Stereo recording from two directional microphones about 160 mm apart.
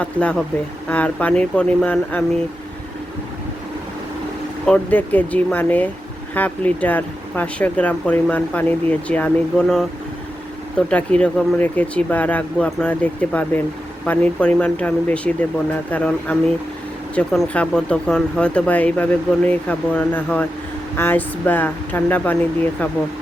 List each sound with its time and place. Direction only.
0.0 s speech: 10° left (ahead or behind)
4.6 s speech: 10° left (ahead or behind)